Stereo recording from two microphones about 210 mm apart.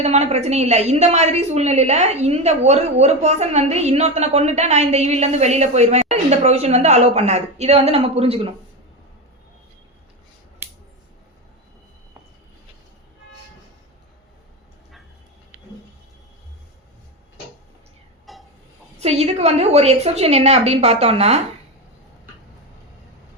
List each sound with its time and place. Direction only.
0.0 s a woman's voice: 30° right (ahead or behind)
10.6 s scissors: 10° right (ahead or behind)
18.3 s a sound: centre (ahead or behind)
18.9 s a woman's voice: 30° right (ahead or behind)